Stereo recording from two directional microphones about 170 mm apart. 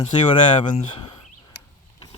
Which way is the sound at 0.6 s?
40° left (ahead or behind).